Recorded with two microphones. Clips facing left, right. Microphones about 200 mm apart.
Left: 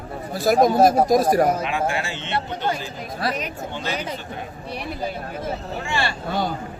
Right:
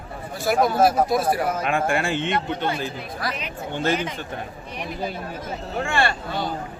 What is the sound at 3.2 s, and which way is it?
Speech, 40° left (ahead or behind).